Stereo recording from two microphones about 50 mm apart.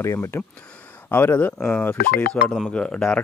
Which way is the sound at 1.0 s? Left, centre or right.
Left.